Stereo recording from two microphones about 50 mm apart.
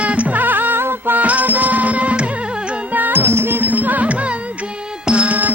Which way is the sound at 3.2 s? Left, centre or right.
Right.